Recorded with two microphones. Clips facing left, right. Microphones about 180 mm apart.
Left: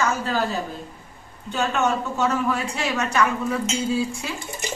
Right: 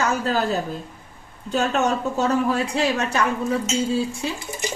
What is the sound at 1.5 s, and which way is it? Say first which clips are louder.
A woman's voice: right 2 dB; 35° right (ahead or behind).